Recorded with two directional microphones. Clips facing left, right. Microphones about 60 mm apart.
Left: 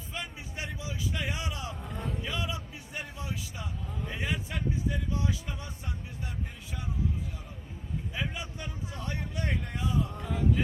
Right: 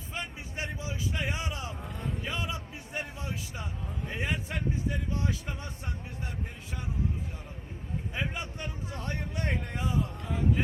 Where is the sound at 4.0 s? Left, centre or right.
Right.